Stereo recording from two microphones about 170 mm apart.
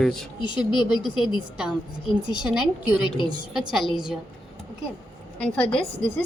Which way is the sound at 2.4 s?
5° right (ahead or behind).